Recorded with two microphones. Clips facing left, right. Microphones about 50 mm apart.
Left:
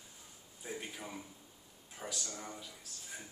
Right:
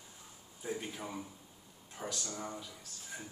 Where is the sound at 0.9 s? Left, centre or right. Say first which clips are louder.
Right 3 dB; centre.